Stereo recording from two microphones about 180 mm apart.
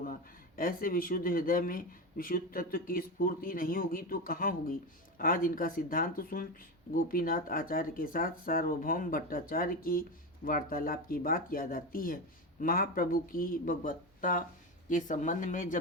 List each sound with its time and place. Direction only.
0.0 s speech: 50° left (ahead or behind)